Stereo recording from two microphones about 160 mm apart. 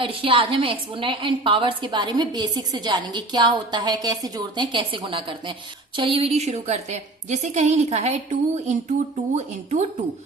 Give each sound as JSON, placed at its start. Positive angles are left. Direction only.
{"t": 0.0, "sound": "a woman's voice", "side_deg": -35}